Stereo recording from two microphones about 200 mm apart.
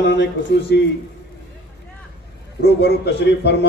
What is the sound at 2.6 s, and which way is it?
A man's voice, 55° left (ahead or behind).